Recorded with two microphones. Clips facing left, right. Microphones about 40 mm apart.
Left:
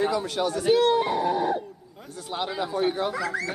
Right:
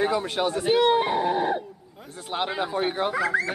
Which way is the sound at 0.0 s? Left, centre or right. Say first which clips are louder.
Right 1 dB; right.